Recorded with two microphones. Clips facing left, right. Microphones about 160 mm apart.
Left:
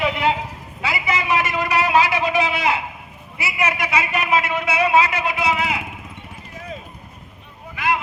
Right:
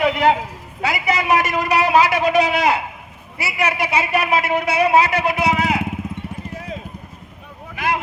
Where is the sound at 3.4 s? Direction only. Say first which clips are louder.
Right 2 dB; 35° right (ahead or behind).